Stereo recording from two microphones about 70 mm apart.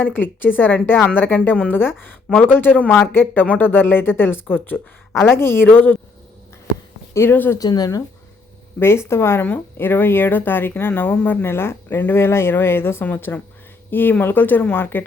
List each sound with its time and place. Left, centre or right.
0.0 s speech: left
3.4 s speech: left
3.7 s speech: left
7.1 s speech: left
7.6 s speech: left
8.8 s speech: left; by 11.4 s centre
11.4 s speech: left
13.1 s speech: left